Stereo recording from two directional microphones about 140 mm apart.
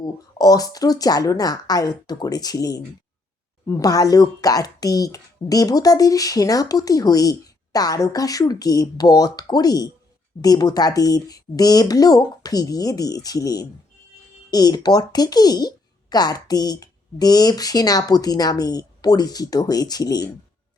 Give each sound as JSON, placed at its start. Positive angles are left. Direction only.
{"t": 0.0, "sound": "speech", "side_deg": 25}